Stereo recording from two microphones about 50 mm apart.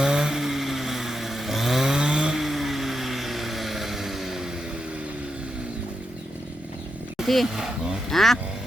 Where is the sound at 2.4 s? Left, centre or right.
Centre.